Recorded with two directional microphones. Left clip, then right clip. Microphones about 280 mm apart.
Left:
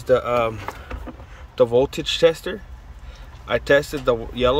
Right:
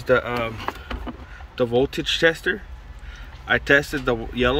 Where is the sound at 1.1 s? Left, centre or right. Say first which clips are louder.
Right 2 dB; right.